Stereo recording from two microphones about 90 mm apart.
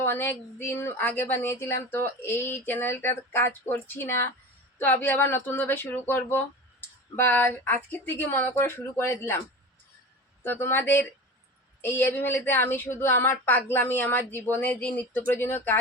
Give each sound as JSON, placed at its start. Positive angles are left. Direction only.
{"t": 0.0, "sound": "speech", "side_deg": 25}
{"t": 10.4, "sound": "speech", "side_deg": 25}